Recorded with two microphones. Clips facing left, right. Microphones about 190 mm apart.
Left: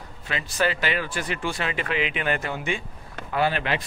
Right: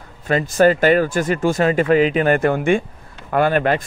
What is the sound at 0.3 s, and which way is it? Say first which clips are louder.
A man's voice: right 11 dB; 45° right (ahead or behind).